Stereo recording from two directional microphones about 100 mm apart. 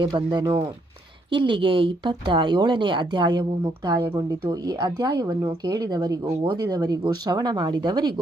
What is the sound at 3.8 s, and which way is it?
Speech, 30° right (ahead or behind).